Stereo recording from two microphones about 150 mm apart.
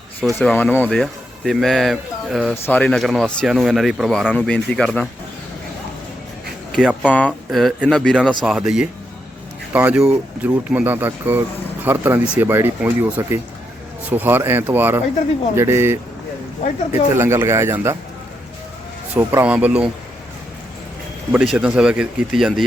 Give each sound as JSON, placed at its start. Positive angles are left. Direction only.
{"t": 0.4, "sound": "speech", "side_deg": 10}
{"t": 2.6, "sound": "speech", "side_deg": 10}
{"t": 4.4, "sound": "speech", "side_deg": 10}
{"t": 6.7, "sound": "speech", "side_deg": 5}
{"t": 17.2, "sound": "speech", "side_deg": -20}
{"t": 19.1, "sound": "speech", "side_deg": -10}
{"t": 21.3, "sound": "speech", "side_deg": -5}